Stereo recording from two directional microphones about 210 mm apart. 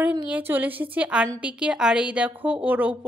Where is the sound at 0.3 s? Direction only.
10° right (ahead or behind).